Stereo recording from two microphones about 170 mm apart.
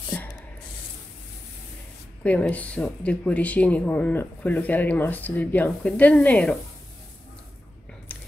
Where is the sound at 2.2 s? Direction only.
10° left (ahead or behind).